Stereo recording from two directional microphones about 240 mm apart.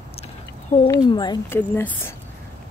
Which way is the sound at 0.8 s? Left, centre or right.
Centre.